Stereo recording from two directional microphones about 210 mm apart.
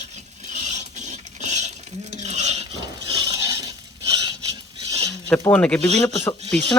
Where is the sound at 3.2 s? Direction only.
15° right (ahead or behind).